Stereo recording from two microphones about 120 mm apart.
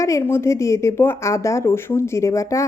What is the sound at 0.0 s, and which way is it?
A woman's voice, 25° left (ahead or behind).